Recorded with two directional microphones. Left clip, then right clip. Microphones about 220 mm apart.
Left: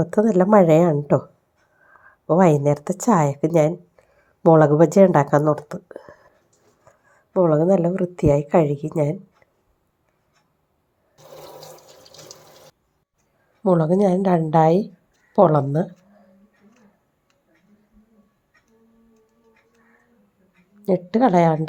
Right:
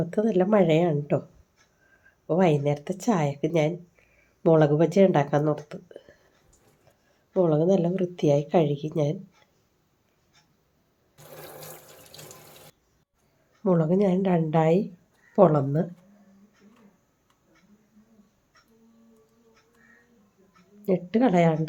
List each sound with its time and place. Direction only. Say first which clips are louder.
0.0 s speech: left 6 dB; 20° left (ahead or behind)
6.9 s a sound: left 12 dB; 20° left (ahead or behind)
7.3 s speech: left 5 dB; 20° left (ahead or behind)
13.7 s a woman's voice: left 6 dB; 15° left (ahead or behind)
20.8 s a woman's voice: left 5 dB; 15° left (ahead or behind)